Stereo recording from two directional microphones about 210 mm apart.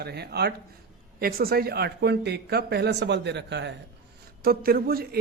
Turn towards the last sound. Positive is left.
turn(degrees=-45)  # may be behind; listen again after turning